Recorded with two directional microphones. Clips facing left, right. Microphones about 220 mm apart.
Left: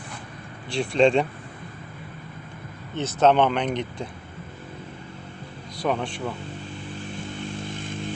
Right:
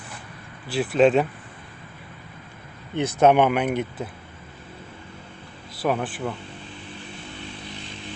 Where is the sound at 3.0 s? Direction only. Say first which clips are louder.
Right 2 dB; 10° right (ahead or behind).